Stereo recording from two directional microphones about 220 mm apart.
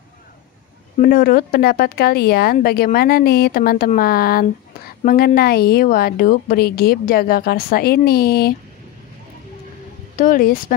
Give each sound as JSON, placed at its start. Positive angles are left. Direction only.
{"t": 0.9, "sound": "a woman's voice", "side_deg": 40}
{"t": 10.1, "sound": "speech", "side_deg": 40}